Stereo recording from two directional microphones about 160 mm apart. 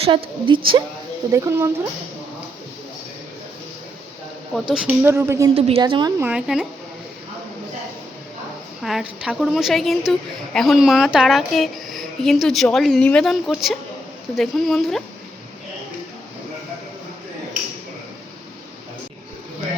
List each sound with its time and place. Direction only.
0.0 s a woman's voice: 30° right (ahead or behind)
1.3 s speech: 20° right (ahead or behind)
4.7 s a woman's voice: 5° right (ahead or behind)
5.0 s speech: 15° right (ahead or behind)
5.5 s a woman's voice: 35° right (ahead or behind)
5.8 s speech: 25° right (ahead or behind)
6.2 s a woman's voice: 5° right (ahead or behind)
8.8 s a woman's voice: centre (ahead or behind)